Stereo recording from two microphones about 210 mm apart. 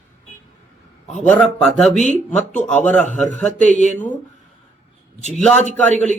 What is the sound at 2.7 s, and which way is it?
Speech, 5° left (ahead or behind).